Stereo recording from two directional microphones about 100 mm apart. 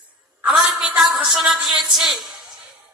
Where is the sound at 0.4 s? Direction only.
5° right (ahead or behind).